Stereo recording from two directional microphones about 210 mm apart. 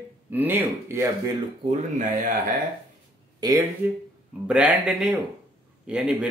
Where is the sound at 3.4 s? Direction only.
15° right (ahead or behind).